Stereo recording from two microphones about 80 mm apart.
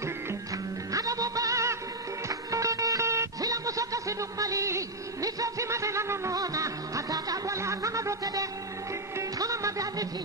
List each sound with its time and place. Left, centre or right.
0.9 s music: right